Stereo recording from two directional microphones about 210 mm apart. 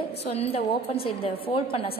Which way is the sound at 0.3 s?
30° left (ahead or behind).